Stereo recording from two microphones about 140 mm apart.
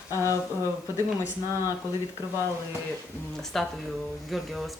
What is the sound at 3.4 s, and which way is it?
Speech, centre (ahead or behind).